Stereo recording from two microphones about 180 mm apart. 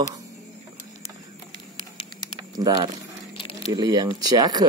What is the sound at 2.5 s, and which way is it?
Speech, 25° right (ahead or behind).